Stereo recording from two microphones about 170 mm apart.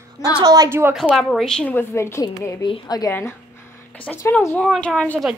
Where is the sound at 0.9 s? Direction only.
Centre (ahead or behind).